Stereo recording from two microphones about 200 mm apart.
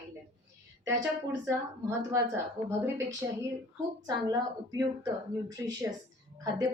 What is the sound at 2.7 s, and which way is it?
A man's voice, 15° right (ahead or behind).